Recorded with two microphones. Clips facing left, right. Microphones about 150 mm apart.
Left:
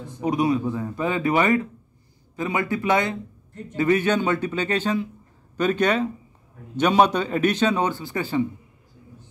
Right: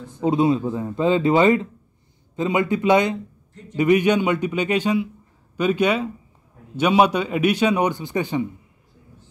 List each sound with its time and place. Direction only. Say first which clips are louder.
0.2 s a man's voice: right 3 dB; 25° right (ahead or behind)